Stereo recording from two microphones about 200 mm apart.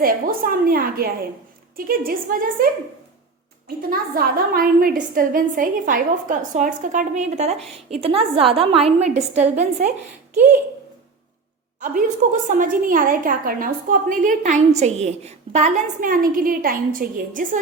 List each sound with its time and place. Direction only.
0.0 s a woman's voice: 45° right (ahead or behind)
3.8 s a woman's voice: 45° right (ahead or behind)
11.8 s a woman's voice: 40° right (ahead or behind)